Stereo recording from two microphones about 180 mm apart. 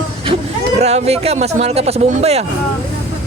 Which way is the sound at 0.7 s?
35° right (ahead or behind).